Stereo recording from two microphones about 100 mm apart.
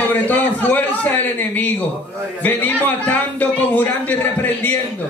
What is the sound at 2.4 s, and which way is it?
A man's voice, 15° left (ahead or behind).